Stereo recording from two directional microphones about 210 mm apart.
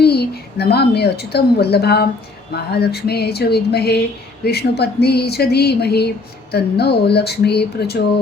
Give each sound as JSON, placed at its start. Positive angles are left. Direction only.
{"t": 0.0, "sound": "a woman's voice", "side_deg": 50}